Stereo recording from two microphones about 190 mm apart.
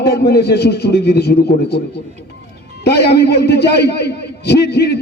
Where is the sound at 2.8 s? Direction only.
60° left (ahead or behind).